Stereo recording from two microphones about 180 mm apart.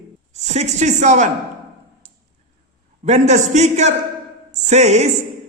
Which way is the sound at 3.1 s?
40° right (ahead or behind).